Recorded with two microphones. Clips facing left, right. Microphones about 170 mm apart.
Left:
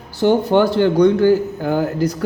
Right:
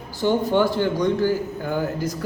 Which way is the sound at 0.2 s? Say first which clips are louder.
Left 5 dB; 75° left (ahead or behind).